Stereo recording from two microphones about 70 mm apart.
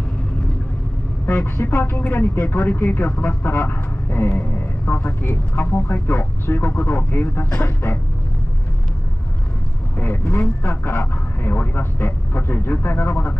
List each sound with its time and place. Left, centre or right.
1.2 s a man's voice: left
9.9 s a man's voice: left